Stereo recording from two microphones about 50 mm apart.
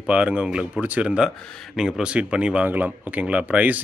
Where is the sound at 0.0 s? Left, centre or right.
Right.